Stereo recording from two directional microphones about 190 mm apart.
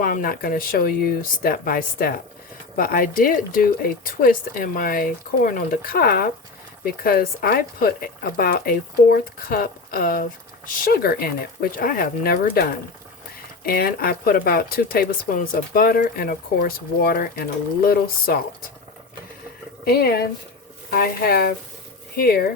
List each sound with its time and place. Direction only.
0.0 s speech: 50° left (ahead or behind)
13.7 s speech: 50° left (ahead or behind)
19.8 s speech: 55° left (ahead or behind)